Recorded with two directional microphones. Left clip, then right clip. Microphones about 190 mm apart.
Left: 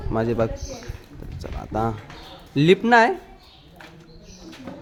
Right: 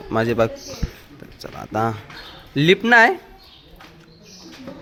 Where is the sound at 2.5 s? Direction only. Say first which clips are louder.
Right 1 dB; 10° left (ahead or behind).